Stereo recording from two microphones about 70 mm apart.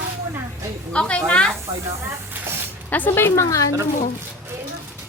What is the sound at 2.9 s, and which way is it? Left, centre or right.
Speech, left.